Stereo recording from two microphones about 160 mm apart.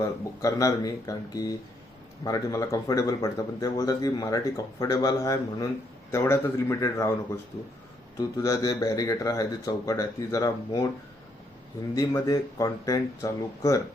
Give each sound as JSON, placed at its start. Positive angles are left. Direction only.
{"t": 0.0, "sound": "speech", "side_deg": 20}
{"t": 8.4, "sound": "speech", "side_deg": 20}
{"t": 11.9, "sound": "speech", "side_deg": 20}